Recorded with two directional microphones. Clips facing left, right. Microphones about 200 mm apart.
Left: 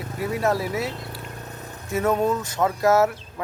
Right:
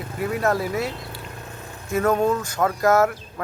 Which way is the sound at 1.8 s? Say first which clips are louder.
Right 2 dB; 20° left (ahead or behind).